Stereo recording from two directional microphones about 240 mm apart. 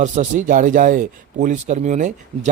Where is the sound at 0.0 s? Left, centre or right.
Right.